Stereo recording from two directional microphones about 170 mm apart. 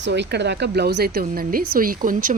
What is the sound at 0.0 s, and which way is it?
Speech, 85° right.